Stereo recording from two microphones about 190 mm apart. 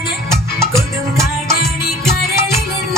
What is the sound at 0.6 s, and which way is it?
Music, 15° right (ahead or behind).